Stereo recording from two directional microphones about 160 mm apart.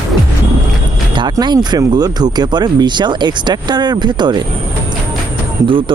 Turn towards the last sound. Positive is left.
turn(degrees=-30)  # may be behind; listen again after turning